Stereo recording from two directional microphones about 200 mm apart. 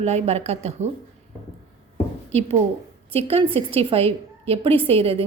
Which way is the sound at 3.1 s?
30° right (ahead or behind).